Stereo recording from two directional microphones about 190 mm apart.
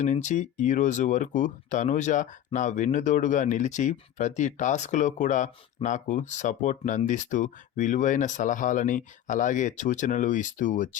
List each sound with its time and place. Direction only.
0.0 s speech: 40° left (ahead or behind)